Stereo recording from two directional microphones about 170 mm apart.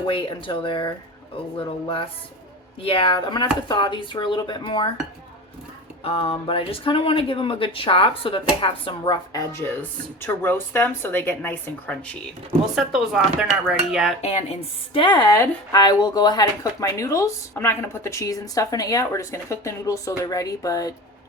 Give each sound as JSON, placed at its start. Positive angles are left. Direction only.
{"t": 0.1, "sound": "speech", "side_deg": 30}
{"t": 6.0, "sound": "a woman's voice", "side_deg": 35}
{"t": 12.7, "sound": "dishes", "side_deg": 0}
{"t": 14.2, "sound": "speech", "side_deg": 40}